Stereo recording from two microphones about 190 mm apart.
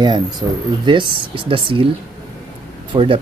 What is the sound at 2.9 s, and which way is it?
Speech, 20° right (ahead or behind).